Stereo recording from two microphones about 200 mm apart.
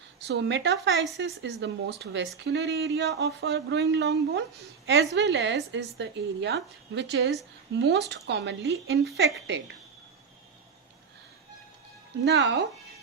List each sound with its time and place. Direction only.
0.3 s a woman's voice: 60° right (ahead or behind)
0.9 s speech: centre (ahead or behind)
1.2 s a woman's voice: 60° right (ahead or behind)
12.2 s a woman's voice: 60° right (ahead or behind)